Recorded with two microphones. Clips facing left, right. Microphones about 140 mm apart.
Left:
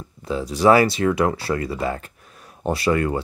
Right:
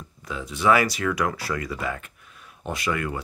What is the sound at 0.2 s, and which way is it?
Speech, 35° left (ahead or behind).